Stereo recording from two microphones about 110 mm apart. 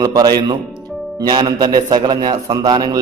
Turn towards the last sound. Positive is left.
turn(degrees=-40)  # may be behind; listen again after turning